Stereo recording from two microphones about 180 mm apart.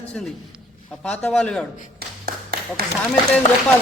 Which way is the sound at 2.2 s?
60° right (ahead or behind).